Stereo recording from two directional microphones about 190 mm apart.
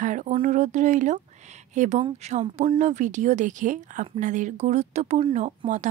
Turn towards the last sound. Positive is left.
turn(degrees=-40)  # may be behind; listen again after turning